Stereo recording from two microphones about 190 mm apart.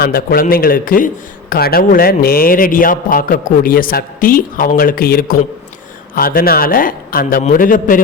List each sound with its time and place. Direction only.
0.0 s a man's voice: 50° left (ahead or behind)